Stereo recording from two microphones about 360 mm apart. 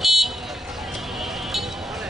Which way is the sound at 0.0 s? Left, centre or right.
Centre.